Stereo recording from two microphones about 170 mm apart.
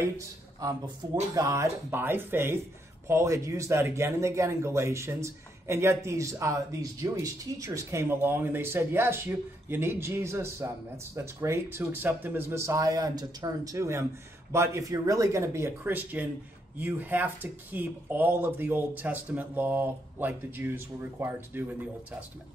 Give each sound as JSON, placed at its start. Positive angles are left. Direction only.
{"t": 0.6, "sound": "speech", "side_deg": -20}